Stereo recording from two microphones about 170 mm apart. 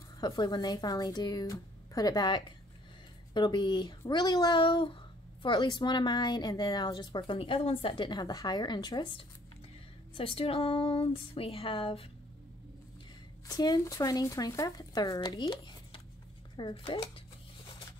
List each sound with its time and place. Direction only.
0.2 s a woman's voice: 25° left (ahead or behind)
13.5 s a woman's voice: 25° left (ahead or behind)